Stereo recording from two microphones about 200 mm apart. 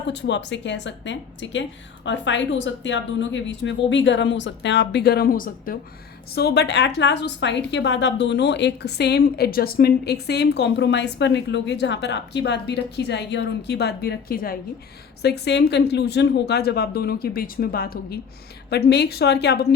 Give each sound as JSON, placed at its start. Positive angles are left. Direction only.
{"t": 0.1, "sound": "a woman's voice", "side_deg": 60}
{"t": 6.3, "sound": "a woman's voice", "side_deg": 55}